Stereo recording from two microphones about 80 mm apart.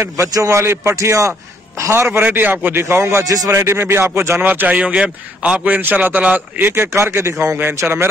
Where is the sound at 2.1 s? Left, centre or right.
Right.